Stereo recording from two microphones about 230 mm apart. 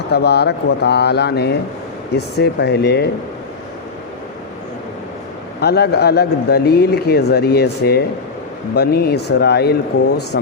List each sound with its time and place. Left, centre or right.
0.1 s speech: left
5.5 s speech: left